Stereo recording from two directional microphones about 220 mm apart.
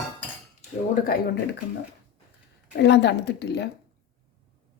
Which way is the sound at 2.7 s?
50° left (ahead or behind).